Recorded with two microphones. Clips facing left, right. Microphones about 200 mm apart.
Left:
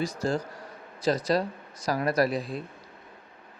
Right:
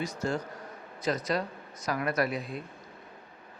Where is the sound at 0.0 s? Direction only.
35° left (ahead or behind).